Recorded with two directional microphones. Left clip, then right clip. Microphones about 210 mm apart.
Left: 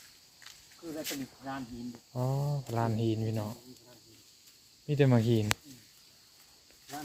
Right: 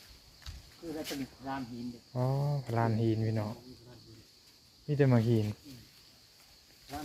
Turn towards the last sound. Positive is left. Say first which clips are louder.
# left 1 dB
turn(degrees=20)  # may be behind; listen again after turning